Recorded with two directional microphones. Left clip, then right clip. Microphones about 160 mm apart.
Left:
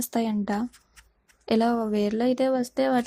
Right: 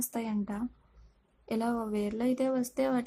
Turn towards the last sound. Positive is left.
turn(degrees=25)  # may be behind; listen again after turning